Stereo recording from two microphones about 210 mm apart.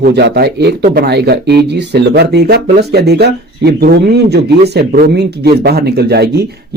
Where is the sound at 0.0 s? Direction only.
55° right (ahead or behind).